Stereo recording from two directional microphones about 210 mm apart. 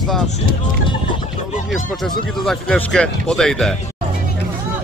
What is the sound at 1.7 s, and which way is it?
Speech, centre (ahead or behind).